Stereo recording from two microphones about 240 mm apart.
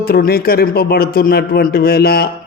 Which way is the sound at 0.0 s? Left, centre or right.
Left.